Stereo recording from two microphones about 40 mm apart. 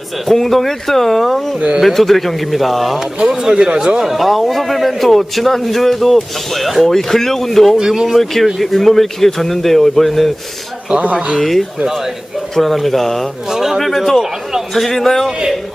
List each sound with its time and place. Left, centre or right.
0.3 s a man's voice: centre
3.4 s a man's voice: centre
4.0 s a man's voice: centre
7.8 s speech: centre
8.1 s a man's voice: centre
11.0 s speech: right
11.3 s a man's voice: centre
13.5 s speech: centre
13.8 s a man's voice: centre